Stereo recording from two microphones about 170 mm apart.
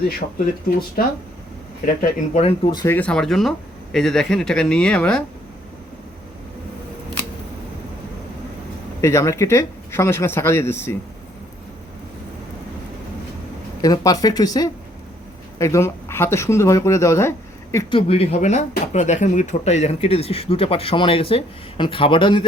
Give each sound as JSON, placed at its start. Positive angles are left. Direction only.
{"t": 1.0, "sound": "speech", "side_deg": 60}
{"t": 2.0, "sound": "speech", "side_deg": 40}
{"t": 2.8, "sound": "speech", "side_deg": 10}
{"t": 9.0, "sound": "speech", "side_deg": 15}
{"t": 13.8, "sound": "speech", "side_deg": 20}
{"t": 17.9, "sound": "speech", "side_deg": 35}